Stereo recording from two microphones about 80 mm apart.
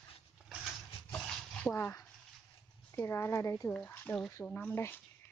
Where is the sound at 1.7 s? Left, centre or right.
Left.